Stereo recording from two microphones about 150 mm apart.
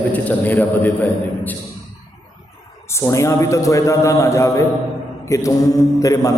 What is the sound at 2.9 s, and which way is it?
A man's voice, 20° left (ahead or behind).